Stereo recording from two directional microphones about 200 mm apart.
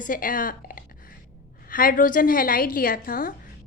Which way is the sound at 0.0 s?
45° left (ahead or behind).